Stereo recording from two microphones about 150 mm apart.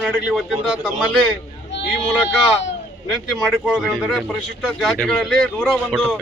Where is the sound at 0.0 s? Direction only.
5° right (ahead or behind).